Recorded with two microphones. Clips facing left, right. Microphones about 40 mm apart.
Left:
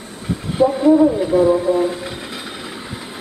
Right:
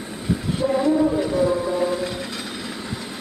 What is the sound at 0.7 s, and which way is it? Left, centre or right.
Speech, centre.